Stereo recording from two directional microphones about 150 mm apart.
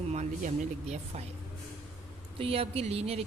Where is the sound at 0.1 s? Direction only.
50° right (ahead or behind).